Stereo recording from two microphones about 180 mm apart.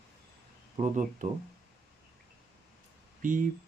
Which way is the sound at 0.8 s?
45° right (ahead or behind).